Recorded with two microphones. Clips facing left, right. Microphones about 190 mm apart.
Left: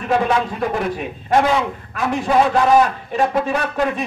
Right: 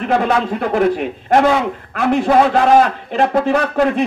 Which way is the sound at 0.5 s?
65° right (ahead or behind).